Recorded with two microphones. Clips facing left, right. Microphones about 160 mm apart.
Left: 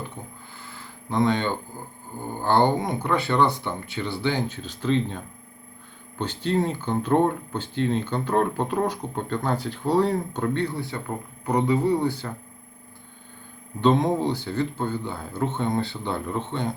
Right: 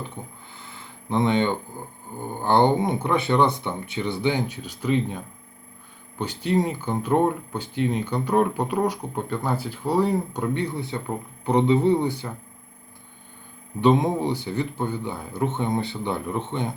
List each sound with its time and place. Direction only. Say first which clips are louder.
0.2 s a sound: right 1 dB; 25° right (ahead or behind)
2.4 s speech: right 2 dB; 20° right (ahead or behind)
6.1 s speech: right 1 dB; 10° right (ahead or behind)
13.8 s speech: right 1 dB; 15° right (ahead or behind)